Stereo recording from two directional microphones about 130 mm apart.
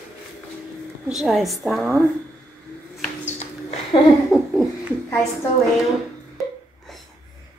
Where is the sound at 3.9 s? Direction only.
40° left (ahead or behind).